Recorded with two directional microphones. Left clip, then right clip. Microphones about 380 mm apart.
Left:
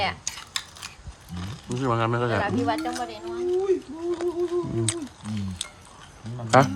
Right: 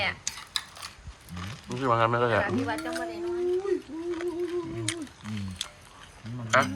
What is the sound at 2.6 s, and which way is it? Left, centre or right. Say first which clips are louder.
Speech: left 5 dB; left.